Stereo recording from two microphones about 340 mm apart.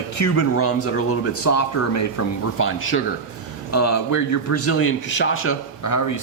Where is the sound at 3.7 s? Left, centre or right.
Left.